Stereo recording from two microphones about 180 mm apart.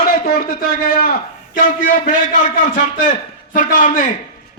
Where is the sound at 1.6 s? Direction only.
50° left (ahead or behind).